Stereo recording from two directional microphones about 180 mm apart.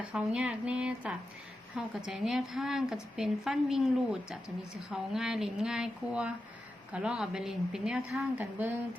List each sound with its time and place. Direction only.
0.0 s speech: 5° right (ahead or behind)